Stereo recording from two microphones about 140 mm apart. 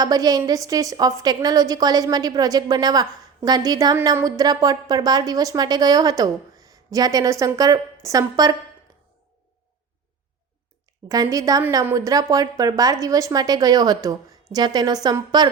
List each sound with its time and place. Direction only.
0.0 s a woman's voice: 25° right (ahead or behind)
11.1 s a woman's voice: 25° right (ahead or behind)